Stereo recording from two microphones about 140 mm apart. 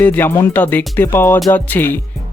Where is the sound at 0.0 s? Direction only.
15° left (ahead or behind).